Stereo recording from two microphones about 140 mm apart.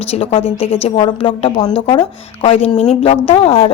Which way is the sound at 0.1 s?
40° left (ahead or behind).